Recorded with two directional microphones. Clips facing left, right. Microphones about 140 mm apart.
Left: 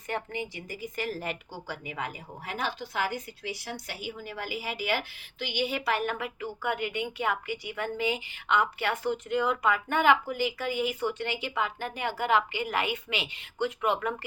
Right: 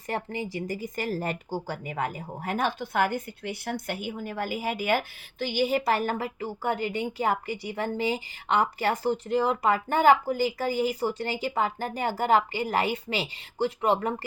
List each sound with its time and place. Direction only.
0.1 s speech: 35° right (ahead or behind)